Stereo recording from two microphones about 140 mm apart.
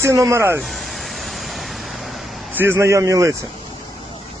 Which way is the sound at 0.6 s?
Centre (ahead or behind).